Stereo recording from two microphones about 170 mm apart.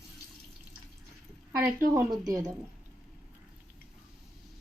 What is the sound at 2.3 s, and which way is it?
Speech, 20° right (ahead or behind).